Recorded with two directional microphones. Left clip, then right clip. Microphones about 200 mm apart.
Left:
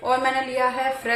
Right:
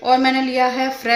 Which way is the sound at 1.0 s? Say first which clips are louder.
Right 8 dB; 60° right (ahead or behind).